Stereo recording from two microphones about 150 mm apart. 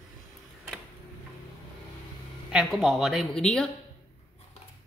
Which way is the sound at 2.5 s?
Centre (ahead or behind).